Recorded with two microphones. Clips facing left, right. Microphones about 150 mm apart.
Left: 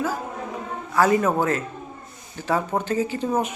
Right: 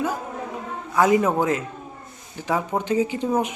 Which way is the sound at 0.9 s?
15° right (ahead or behind).